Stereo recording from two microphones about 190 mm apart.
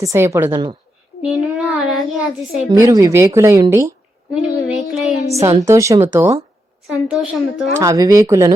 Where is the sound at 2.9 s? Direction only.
15° right (ahead or behind).